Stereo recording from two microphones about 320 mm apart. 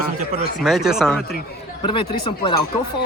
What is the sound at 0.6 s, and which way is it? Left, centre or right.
Speech, centre.